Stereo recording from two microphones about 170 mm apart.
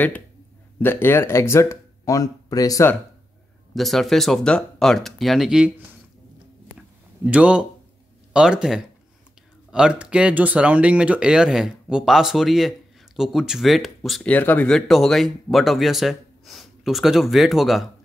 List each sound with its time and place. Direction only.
0.7 s speech: 10° left (ahead or behind)
3.7 s speech: centre (ahead or behind)
7.2 s speech: 5° right (ahead or behind)